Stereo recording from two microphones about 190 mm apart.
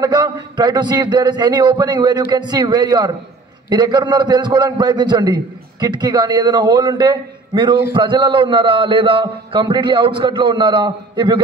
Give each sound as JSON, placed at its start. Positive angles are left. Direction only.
{"t": 0.0, "sound": "a man's voice", "side_deg": -20}